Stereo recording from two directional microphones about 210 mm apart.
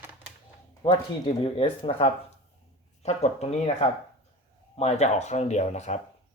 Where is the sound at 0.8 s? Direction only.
25° left (ahead or behind).